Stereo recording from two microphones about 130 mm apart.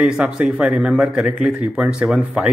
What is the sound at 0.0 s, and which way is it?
A man's voice, 5° right (ahead or behind).